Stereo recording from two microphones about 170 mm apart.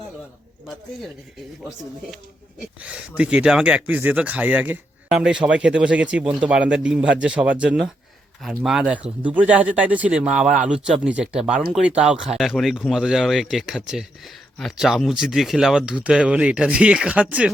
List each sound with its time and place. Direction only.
2.8 s speech: 5° right (ahead or behind)